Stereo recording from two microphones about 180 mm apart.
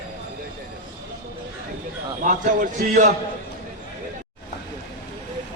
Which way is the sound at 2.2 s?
45° right (ahead or behind).